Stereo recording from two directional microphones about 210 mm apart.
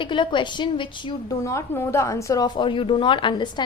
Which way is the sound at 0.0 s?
25° left (ahead or behind).